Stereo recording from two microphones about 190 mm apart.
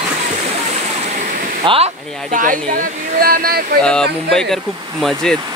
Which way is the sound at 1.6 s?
30° right (ahead or behind).